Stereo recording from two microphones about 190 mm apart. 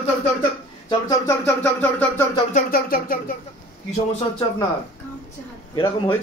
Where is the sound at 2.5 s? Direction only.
50° left (ahead or behind).